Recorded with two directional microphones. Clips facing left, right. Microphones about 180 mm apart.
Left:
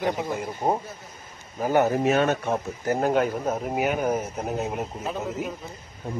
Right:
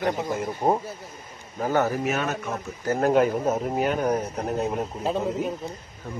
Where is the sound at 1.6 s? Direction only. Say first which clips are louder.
Left 2 dB; 15° left (ahead or behind).